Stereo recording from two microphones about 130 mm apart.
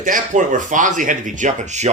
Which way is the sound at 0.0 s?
85° right.